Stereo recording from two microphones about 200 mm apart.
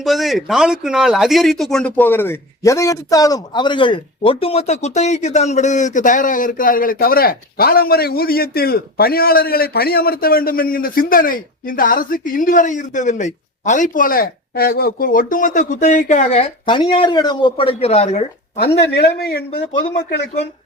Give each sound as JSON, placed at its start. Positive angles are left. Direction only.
{"t": 0.0, "sound": "speech", "side_deg": 0}
{"t": 18.7, "sound": "speech", "side_deg": 55}